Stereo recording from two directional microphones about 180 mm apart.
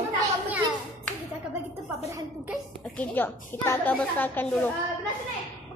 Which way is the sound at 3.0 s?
10° left (ahead or behind).